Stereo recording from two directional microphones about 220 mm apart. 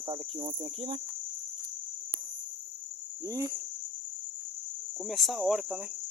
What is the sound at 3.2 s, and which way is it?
Cricket, 15° right (ahead or behind).